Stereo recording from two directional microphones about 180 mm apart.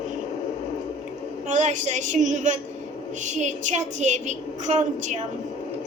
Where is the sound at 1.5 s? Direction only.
40° right (ahead or behind).